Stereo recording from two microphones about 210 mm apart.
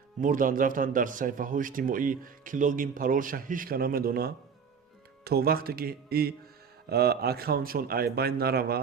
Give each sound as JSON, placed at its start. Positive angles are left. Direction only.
{"t": 0.2, "sound": "a man's voice", "side_deg": -40}